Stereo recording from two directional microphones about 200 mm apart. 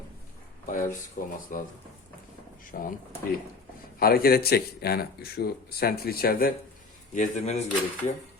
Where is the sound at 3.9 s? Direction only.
50° left (ahead or behind).